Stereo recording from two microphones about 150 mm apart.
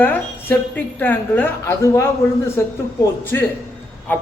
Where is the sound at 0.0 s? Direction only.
10° left (ahead or behind).